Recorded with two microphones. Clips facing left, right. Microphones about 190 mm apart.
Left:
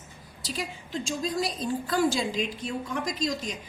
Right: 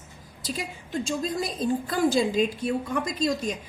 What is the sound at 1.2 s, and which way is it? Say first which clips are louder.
A woman's voice: right 1 dB; 50° right (ahead or behind).